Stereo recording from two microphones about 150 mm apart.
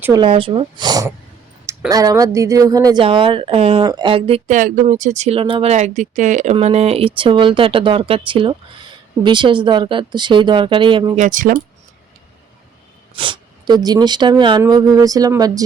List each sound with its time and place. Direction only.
0.1 s speech: 35° right (ahead or behind)
3.0 s speech: 35° right (ahead or behind)
4.4 s speech: 60° right (ahead or behind); by 5.7 s 35° right (ahead or behind)
5.7 s speech: 50° right (ahead or behind); by 11.2 s 35° right (ahead or behind)
11.2 s speech: 60° right (ahead or behind)
13.1 s speech: 35° right (ahead or behind)